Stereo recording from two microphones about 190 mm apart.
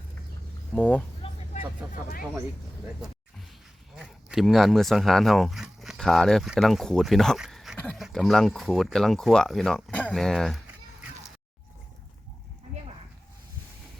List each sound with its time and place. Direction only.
0.7 s speech: 10° left (ahead or behind)
1.2 s vehicle: 40° left (ahead or behind)
3.9 s speech: 5° right (ahead or behind)